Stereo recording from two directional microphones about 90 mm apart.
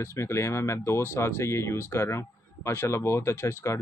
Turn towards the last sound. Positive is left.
turn(degrees=30)  # may be behind; listen again after turning